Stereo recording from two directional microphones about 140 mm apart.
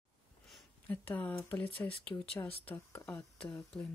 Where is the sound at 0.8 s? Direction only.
10° left (ahead or behind).